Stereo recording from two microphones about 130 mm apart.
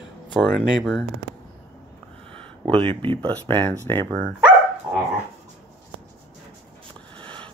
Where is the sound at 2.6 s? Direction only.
45° right (ahead or behind).